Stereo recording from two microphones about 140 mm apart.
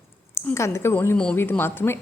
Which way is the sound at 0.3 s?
20° left (ahead or behind).